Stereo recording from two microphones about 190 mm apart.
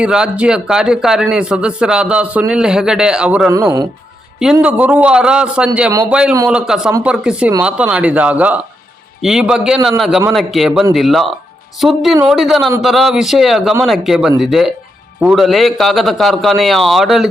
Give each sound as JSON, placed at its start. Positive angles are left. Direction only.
{"t": 0.0, "sound": "a man's voice", "side_deg": -5}
{"t": 3.5, "sound": "speech", "side_deg": -20}
{"t": 4.6, "sound": "a man's voice", "side_deg": -5}